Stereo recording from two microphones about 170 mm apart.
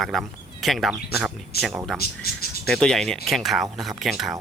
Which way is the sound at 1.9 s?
65° left (ahead or behind).